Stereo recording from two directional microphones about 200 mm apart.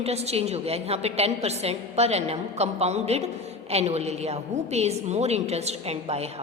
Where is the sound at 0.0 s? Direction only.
30° right (ahead or behind).